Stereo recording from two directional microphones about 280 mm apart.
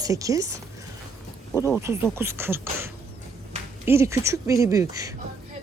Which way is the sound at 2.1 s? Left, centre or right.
Centre.